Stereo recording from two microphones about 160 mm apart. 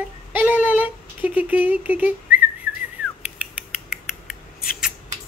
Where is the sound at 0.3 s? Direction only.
10° right (ahead or behind).